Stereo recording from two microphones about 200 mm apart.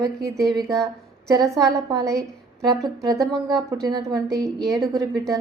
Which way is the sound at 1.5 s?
15° right (ahead or behind).